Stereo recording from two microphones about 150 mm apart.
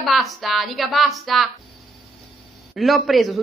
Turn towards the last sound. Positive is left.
turn(degrees=0)  # may be behind; listen again after turning